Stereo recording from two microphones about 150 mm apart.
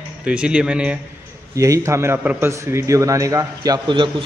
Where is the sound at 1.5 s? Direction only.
20° right (ahead or behind).